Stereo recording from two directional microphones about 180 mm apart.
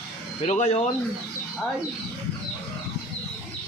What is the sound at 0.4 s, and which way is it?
Speech, 40° left (ahead or behind).